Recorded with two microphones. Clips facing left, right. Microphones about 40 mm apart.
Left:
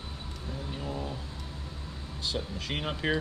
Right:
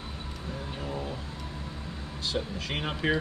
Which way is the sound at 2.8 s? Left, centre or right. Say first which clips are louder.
Right 2 dB; centre.